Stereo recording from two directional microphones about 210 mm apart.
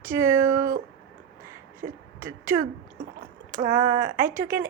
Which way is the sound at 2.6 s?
40° right (ahead or behind).